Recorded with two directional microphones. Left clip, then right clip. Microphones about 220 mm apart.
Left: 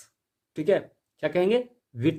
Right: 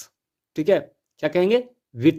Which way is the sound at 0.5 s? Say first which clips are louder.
Right 4 dB; 30° right (ahead or behind).